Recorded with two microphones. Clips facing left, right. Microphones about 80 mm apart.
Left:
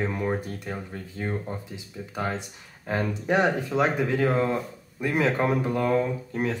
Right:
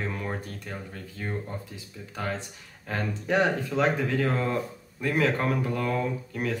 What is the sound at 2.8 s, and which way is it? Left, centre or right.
Speech, centre.